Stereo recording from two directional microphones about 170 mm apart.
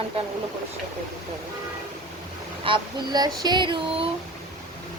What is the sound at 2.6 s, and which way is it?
Speech, 25° right (ahead or behind).